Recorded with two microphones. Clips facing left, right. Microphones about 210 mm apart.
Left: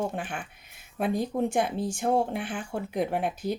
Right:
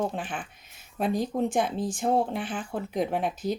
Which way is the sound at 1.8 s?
10° left (ahead or behind).